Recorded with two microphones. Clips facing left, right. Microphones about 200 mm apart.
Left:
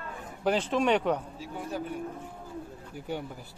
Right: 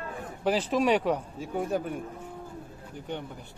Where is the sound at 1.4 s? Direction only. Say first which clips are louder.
Right 6 dB; 50° right (ahead or behind).